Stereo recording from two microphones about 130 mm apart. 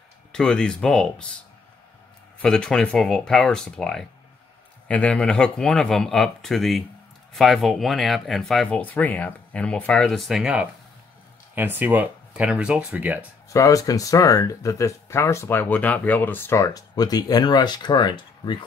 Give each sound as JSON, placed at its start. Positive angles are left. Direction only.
{"t": 0.3, "sound": "speech", "side_deg": 5}
{"t": 2.4, "sound": "speech", "side_deg": 5}
{"t": 13.5, "sound": "speech", "side_deg": 25}